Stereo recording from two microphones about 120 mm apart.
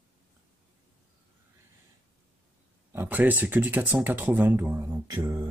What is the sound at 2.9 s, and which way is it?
Speech, 15° right (ahead or behind).